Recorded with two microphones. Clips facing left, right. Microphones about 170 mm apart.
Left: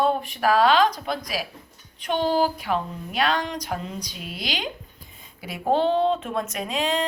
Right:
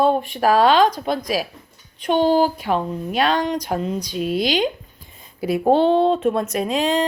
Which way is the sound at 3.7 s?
40° right (ahead or behind).